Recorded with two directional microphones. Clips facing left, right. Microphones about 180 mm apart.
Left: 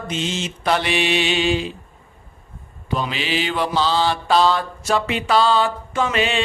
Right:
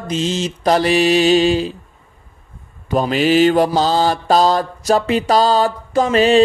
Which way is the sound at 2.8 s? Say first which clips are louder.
Right 9 dB; 45° right (ahead or behind).